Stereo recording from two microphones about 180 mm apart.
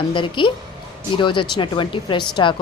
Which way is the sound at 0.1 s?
25° left (ahead or behind).